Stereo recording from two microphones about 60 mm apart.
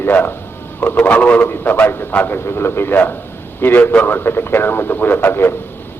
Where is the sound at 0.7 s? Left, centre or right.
Left.